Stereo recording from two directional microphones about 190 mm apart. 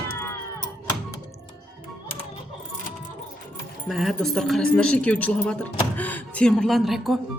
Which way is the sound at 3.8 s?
Centre (ahead or behind).